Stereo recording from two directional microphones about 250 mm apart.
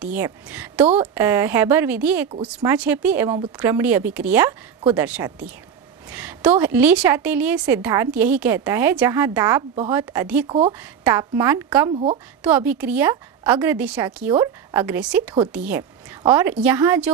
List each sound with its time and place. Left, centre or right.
0.0 s a woman's voice: centre
10.4 s speech: right
10.7 s a woman's voice: centre